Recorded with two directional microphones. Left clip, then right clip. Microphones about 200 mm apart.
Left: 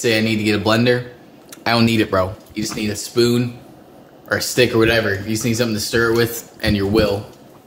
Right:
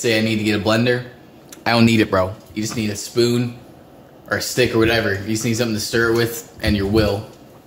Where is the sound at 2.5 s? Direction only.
5° left (ahead or behind).